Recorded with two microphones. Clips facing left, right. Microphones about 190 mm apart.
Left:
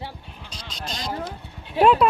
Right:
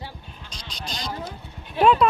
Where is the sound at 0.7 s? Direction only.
Centre (ahead or behind).